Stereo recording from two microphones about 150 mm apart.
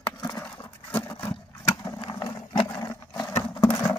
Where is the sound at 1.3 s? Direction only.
30° left (ahead or behind).